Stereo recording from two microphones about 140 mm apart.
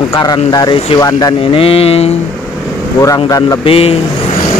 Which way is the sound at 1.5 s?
45° left (ahead or behind).